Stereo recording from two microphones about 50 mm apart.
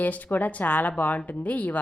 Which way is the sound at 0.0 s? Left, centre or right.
Left.